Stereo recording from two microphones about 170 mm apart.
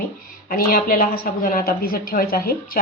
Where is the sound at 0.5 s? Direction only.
55° left (ahead or behind).